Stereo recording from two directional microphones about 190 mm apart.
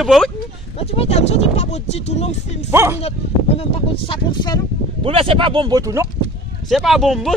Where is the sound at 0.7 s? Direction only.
30° left (ahead or behind).